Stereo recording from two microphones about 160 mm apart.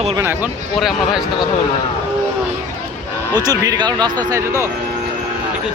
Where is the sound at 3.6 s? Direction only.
25° right (ahead or behind).